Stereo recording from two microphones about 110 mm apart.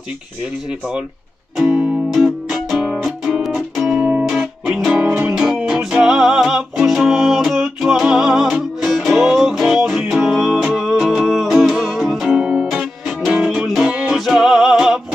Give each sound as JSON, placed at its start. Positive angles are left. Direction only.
{"t": 2.1, "sound": "music", "side_deg": -5}